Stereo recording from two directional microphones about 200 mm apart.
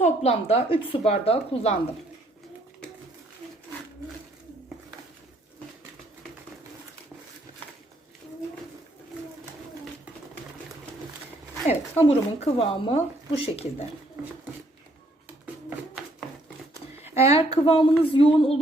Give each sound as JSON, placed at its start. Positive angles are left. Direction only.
{"t": 0.0, "sound": "a woman's voice", "side_deg": 30}
{"t": 11.7, "sound": "a woman's voice", "side_deg": 30}
{"t": 16.7, "sound": "a sound", "side_deg": -10}
{"t": 17.2, "sound": "a woman's voice", "side_deg": 30}